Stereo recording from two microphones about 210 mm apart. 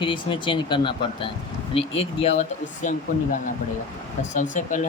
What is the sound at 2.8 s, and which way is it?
Speech, 40° left (ahead or behind).